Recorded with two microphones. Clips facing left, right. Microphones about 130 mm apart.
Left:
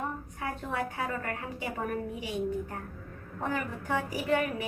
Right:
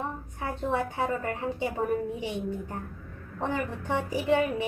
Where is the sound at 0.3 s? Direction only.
25° right (ahead or behind).